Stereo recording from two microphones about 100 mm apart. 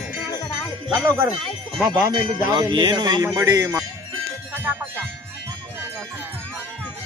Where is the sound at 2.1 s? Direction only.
45° right (ahead or behind).